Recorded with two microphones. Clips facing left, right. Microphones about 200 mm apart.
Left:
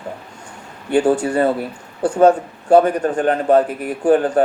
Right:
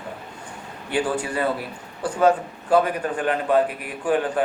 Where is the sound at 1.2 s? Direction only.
45° left (ahead or behind).